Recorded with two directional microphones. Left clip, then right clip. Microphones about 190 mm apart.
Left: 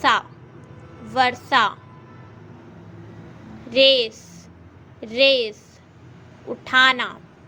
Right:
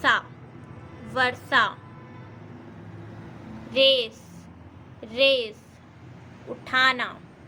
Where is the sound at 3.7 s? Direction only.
25° left (ahead or behind).